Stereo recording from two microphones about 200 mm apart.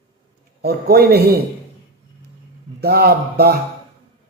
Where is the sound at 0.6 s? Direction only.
50° right (ahead or behind).